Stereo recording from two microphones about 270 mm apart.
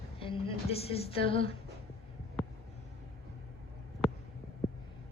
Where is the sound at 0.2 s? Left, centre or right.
Centre.